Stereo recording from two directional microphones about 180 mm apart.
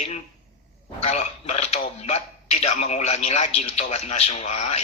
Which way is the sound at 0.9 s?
35° left (ahead or behind).